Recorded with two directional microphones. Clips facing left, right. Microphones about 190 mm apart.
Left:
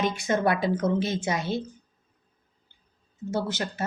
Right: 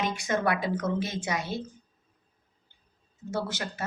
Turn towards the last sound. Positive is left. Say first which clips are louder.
# left 3 dB
turn(degrees=25)  # may be behind; listen again after turning